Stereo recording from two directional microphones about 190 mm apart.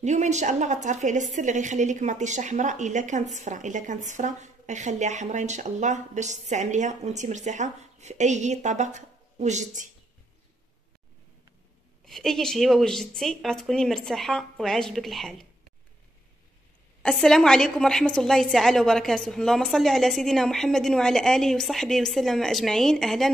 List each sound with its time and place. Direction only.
0.0 s a woman's voice: 35° right (ahead or behind)
12.1 s a woman's voice: centre (ahead or behind)
17.0 s a woman's voice: 5° left (ahead or behind)